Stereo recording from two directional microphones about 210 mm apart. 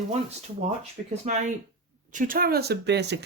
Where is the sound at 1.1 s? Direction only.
35° right (ahead or behind).